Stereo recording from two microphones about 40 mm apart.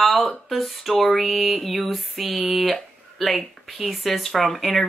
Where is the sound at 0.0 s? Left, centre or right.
Centre.